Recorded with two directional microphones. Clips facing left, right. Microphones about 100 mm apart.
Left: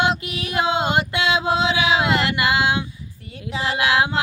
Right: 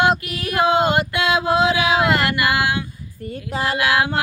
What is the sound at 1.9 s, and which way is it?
Female singing, 25° left (ahead or behind).